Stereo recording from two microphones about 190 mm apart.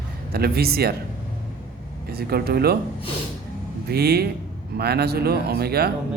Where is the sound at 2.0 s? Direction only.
55° right (ahead or behind).